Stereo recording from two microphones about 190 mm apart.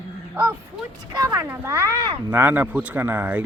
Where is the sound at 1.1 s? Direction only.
15° right (ahead or behind).